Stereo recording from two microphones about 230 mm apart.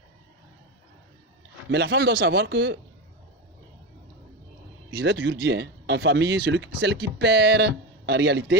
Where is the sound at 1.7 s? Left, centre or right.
Right.